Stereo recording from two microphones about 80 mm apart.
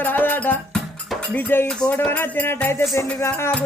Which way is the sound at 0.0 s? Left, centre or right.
Left.